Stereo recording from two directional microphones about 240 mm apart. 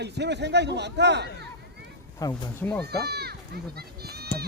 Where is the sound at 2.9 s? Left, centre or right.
Right.